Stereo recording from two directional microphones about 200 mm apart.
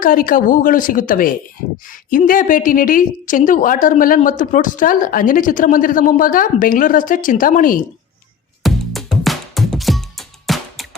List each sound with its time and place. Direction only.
0.0 s a woman's voice: 45° left (ahead or behind)
8.6 s music: centre (ahead or behind)